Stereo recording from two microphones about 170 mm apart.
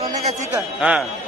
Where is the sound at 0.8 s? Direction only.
5° right (ahead or behind).